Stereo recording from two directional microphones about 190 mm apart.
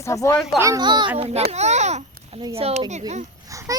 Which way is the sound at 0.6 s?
20° right (ahead or behind).